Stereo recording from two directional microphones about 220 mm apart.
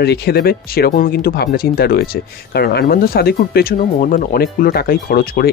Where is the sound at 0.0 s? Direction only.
45° left (ahead or behind).